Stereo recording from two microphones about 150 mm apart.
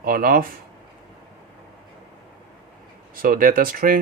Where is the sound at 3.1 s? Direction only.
65° right (ahead or behind).